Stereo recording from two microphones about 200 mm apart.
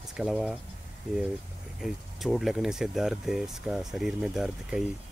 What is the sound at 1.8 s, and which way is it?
Speech, centre (ahead or behind).